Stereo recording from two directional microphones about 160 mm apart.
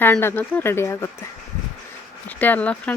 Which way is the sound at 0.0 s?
15° left (ahead or behind).